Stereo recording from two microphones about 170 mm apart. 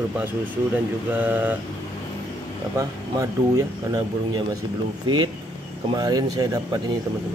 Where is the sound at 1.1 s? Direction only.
10° right (ahead or behind).